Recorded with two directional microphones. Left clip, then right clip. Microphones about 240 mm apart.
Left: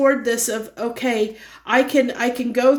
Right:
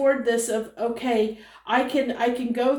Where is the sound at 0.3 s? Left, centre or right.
Left.